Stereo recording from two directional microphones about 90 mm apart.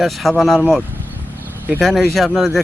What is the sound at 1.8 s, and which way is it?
Speech, 5° left (ahead or behind).